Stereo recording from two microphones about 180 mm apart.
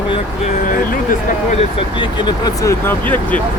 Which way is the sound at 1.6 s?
30° left (ahead or behind).